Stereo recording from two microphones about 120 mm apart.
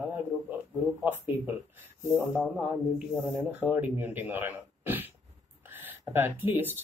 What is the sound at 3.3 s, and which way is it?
Speech, 15° right (ahead or behind).